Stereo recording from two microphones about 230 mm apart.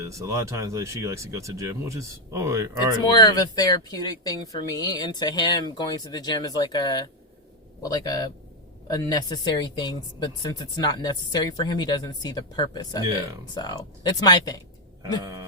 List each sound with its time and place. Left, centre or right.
0.0 s speech: centre
3.0 s speech: centre